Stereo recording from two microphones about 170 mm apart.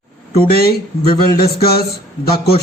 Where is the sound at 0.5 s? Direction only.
65° left (ahead or behind).